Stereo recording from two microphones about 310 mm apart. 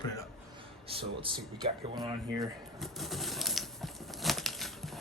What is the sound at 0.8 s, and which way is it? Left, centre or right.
Speech, centre.